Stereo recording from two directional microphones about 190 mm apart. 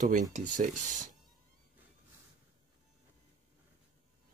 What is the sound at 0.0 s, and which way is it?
Speech, 40° right (ahead or behind).